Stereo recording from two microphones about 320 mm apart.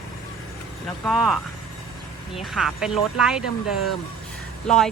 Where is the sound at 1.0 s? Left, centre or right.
Centre.